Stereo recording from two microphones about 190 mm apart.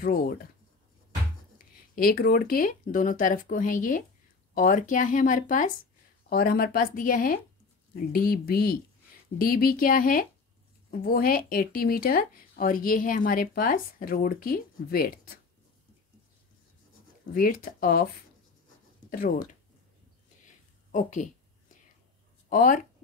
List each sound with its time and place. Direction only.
0.0 s speech: 50° left (ahead or behind)
2.0 s speech: 50° left (ahead or behind)
17.3 s speech: 45° left (ahead or behind)
20.4 s a sound: 40° left (ahead or behind)
22.5 s speech: 45° left (ahead or behind)